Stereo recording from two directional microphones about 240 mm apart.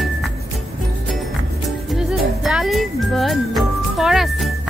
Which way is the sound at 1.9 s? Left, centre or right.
Centre.